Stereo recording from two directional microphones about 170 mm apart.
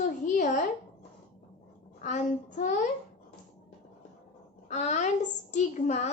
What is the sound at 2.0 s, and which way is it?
Speech, 45° left (ahead or behind).